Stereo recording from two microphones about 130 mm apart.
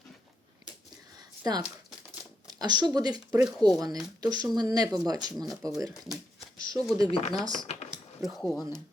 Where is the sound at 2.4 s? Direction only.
30° right (ahead or behind).